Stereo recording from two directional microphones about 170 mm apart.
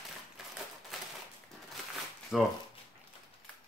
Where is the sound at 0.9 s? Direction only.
Centre (ahead or behind).